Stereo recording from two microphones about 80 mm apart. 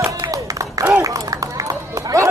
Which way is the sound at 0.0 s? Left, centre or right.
Right.